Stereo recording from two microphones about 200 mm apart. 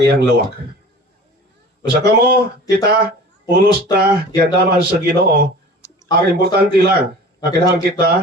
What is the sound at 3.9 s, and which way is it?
Speech, 50° right (ahead or behind).